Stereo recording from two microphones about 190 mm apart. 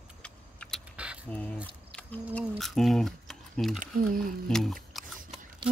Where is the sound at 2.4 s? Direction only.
Centre (ahead or behind).